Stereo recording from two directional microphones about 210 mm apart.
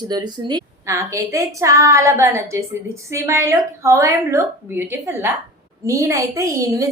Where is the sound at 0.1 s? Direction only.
20° right (ahead or behind).